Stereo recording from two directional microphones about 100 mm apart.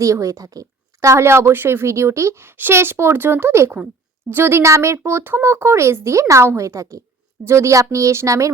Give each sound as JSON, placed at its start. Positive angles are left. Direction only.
{"t": 0.0, "sound": "a woman's voice", "side_deg": -35}